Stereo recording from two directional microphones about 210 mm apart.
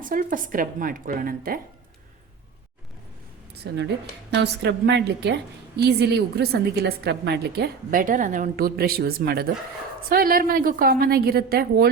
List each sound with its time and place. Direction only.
0.0 s a woman's voice: 40° right (ahead or behind)
3.5 s a woman's voice: 55° right (ahead or behind)